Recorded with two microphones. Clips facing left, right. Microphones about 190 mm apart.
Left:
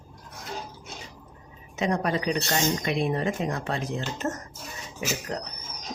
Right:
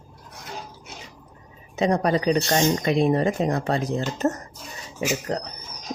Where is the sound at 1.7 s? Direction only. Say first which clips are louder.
Right 5 dB; 35° right (ahead or behind).